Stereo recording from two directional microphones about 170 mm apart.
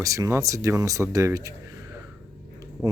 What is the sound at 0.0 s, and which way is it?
Speech, 20° right (ahead or behind).